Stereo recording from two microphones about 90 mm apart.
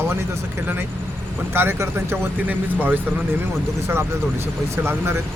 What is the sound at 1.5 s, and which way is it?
Speech, 25° right (ahead or behind).